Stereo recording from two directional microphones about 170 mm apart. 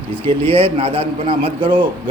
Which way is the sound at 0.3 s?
35° right (ahead or behind).